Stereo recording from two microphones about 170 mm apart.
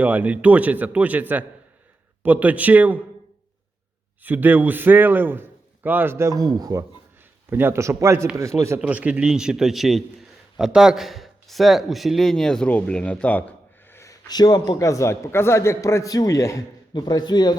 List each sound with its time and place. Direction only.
0.0 s a man's voice: 10° right (ahead or behind)
4.2 s a man's voice: 10° right (ahead or behind); by 13.5 s 10° left (ahead or behind)
13.9 s a man's voice: 20° left (ahead or behind)